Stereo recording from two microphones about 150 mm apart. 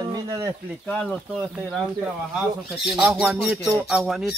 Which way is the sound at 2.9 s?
10° right (ahead or behind).